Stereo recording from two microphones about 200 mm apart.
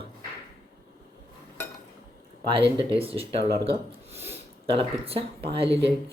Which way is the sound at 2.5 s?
25° right (ahead or behind).